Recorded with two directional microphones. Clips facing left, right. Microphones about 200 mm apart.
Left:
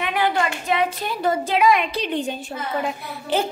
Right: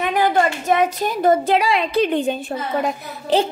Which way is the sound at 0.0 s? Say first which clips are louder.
Right 4 dB; 40° right (ahead or behind).